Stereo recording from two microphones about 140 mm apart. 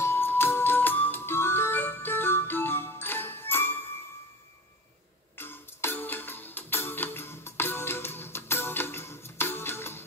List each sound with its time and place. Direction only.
0.0 s music: 15° left (ahead or behind)
5.4 s music: 15° left (ahead or behind)